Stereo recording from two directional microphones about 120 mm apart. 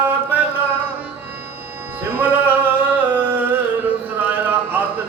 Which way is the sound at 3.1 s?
15° right (ahead or behind).